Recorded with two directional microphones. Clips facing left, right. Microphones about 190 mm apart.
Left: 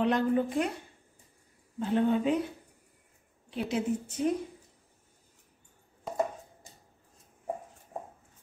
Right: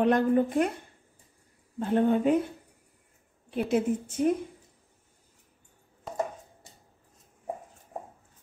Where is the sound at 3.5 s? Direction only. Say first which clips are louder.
Right 4 dB; 50° right (ahead or behind).